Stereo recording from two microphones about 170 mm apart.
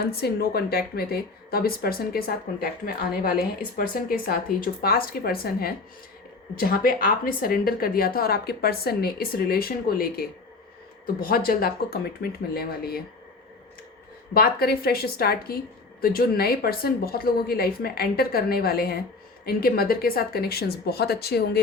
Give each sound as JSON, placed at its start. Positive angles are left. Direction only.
{"t": 0.0, "sound": "a woman's voice", "side_deg": 65}
{"t": 14.3, "sound": "a woman's voice", "side_deg": 65}